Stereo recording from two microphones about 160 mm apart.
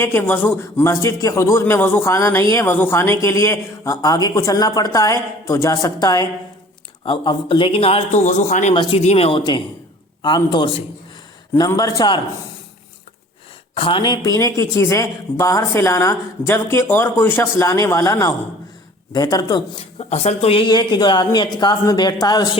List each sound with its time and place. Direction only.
0.0 s a man's voice: 15° left (ahead or behind)
7.0 s a man's voice: 35° left (ahead or behind); by 8.7 s 50° left (ahead or behind)
8.7 s a man's voice: 35° left (ahead or behind)
13.7 s speech: 35° left (ahead or behind)